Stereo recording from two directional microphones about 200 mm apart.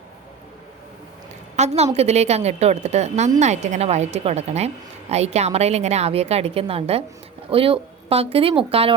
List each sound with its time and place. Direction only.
1.5 s a woman's voice: 35° right (ahead or behind)